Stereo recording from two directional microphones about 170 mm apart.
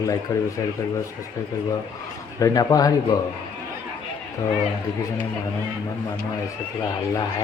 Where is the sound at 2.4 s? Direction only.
20° left (ahead or behind).